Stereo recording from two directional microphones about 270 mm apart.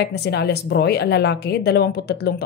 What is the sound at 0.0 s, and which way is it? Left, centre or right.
A woman's voice, left.